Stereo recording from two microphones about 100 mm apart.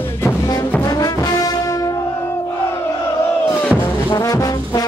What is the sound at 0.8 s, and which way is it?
Music, 35° left (ahead or behind).